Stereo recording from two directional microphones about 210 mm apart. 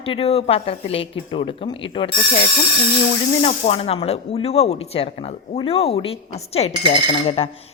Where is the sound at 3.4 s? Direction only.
30° left (ahead or behind).